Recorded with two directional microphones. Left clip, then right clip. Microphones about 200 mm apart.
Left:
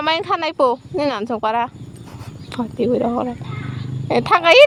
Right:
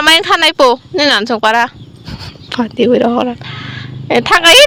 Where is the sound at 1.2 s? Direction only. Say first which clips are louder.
Right 8 dB; 5° right (ahead or behind).